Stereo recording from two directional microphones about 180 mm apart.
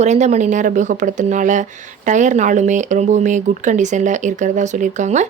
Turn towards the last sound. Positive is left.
turn(degrees=-40)  # may be behind; listen again after turning